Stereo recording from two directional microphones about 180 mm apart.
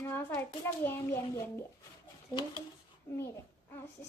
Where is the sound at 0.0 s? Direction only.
10° left (ahead or behind).